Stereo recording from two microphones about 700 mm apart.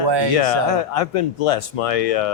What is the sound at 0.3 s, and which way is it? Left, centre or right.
Speech, left.